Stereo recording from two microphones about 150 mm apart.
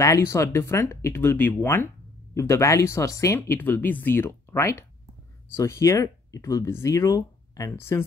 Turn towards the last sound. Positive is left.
turn(degrees=20)  # may be behind; listen again after turning